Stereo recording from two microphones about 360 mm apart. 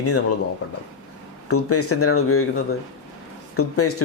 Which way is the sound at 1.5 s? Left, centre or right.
Left.